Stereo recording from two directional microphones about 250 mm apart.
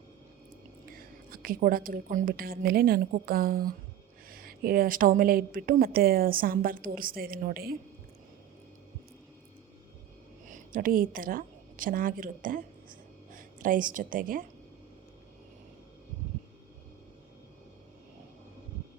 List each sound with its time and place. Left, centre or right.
0.9 s a woman's voice: right
10.5 s a woman's voice: right